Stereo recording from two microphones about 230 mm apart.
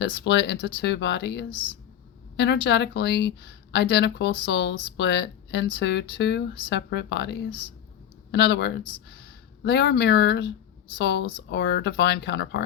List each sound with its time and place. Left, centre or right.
0.0 s speech: left